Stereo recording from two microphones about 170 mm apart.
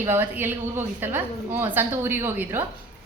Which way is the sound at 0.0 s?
15° right (ahead or behind).